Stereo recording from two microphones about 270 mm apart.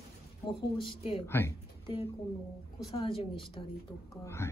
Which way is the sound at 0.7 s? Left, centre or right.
Centre.